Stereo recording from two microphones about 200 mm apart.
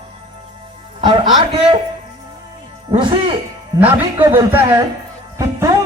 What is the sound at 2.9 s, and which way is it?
Speech, 25° right (ahead or behind).